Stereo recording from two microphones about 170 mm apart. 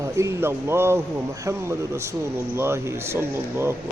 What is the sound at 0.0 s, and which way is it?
A man's voice, 15° right (ahead or behind).